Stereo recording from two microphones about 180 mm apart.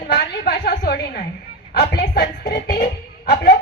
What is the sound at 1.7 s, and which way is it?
Music, 60° left (ahead or behind).